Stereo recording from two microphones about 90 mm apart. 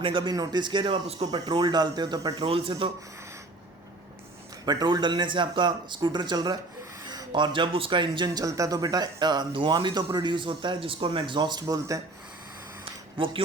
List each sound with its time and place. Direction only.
0.0 s a man's voice: 70° right (ahead or behind)
0.3 s speech: 45° right (ahead or behind)
0.6 s speech: 60° right (ahead or behind); by 2.4 s 45° right (ahead or behind)
2.5 s speech: 85° right
4.6 s speech: 50° right (ahead or behind)
8.4 s speech: 40° right (ahead or behind); by 11.6 s 55° right (ahead or behind)
11.7 s speech: 40° right (ahead or behind)
12.8 s a sound: 75° right (ahead or behind)